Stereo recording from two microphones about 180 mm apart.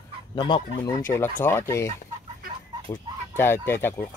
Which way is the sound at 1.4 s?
15° left (ahead or behind).